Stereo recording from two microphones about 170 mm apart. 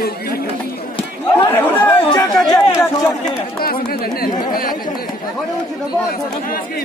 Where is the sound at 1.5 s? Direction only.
10° left (ahead or behind).